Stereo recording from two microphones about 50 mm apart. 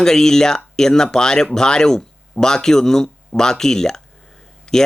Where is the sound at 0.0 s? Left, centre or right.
Centre.